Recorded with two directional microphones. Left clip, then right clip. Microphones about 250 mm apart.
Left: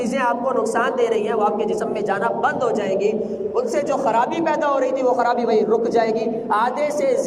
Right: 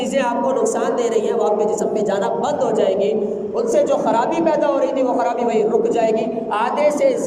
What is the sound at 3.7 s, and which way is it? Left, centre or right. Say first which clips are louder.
A woman's voice: right 4 dB; centre.